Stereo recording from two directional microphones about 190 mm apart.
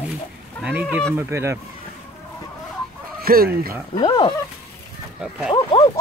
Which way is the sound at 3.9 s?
20° left (ahead or behind).